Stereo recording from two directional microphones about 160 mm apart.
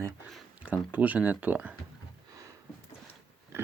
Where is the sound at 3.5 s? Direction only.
15° right (ahead or behind).